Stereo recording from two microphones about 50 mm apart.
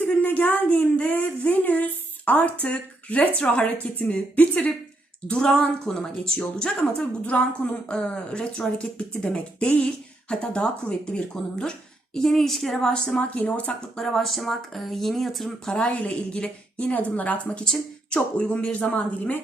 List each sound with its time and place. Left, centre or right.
0.0 s a sound: left
4.4 s speech: left
5.3 s speech: centre
12.1 s speech: centre
13.1 s speech: left
13.9 s speech: centre
15.8 s speech: left